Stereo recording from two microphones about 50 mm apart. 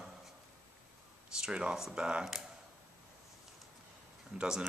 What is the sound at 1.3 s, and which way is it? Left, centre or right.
Speech, centre.